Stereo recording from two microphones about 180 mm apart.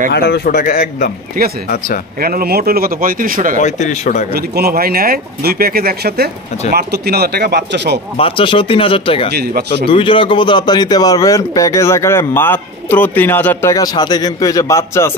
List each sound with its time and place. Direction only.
0.1 s a man's voice: 65° left (ahead or behind); by 1.1 s 50° left (ahead or behind)
1.4 s speech: 55° right (ahead or behind)
3.6 s speech: 40° left (ahead or behind)
4.3 s speech: 60° right (ahead or behind)
8.2 s a man's voice: 30° left (ahead or behind)
9.3 s speech: 60° right (ahead or behind)
9.8 s a man's voice: 30° left (ahead or behind)